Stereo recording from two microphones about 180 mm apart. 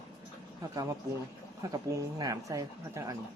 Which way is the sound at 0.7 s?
20° right (ahead or behind).